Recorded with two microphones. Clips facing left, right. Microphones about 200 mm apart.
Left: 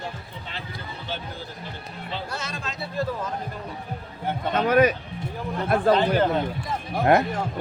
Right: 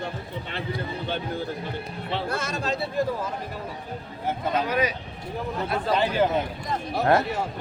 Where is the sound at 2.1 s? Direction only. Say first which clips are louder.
Right 5 dB; 55° right (ahead or behind).